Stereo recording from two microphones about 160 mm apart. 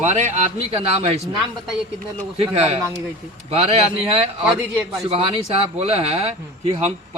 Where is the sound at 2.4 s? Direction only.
40° right (ahead or behind).